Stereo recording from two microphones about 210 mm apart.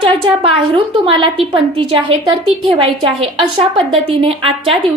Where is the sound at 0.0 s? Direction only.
25° right (ahead or behind).